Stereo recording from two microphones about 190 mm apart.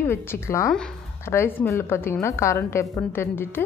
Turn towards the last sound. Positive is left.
turn(degrees=10)  # may be behind; listen again after turning